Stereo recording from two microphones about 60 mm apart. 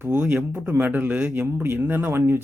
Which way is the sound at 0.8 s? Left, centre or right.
Right.